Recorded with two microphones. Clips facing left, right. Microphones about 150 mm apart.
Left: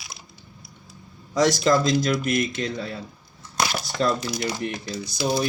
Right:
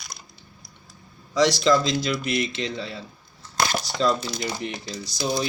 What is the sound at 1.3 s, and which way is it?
Speech, 45° left (ahead or behind).